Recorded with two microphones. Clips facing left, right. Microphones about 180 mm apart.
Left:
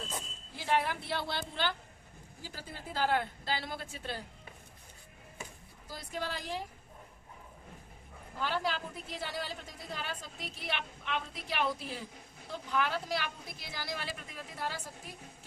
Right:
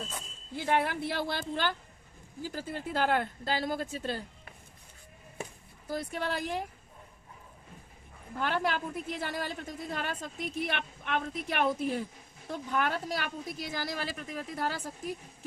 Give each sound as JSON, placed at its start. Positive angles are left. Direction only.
{"t": 0.5, "sound": "a woman's voice", "side_deg": -55}
{"t": 5.9, "sound": "speech", "side_deg": -55}
{"t": 8.4, "sound": "a woman's voice", "side_deg": -60}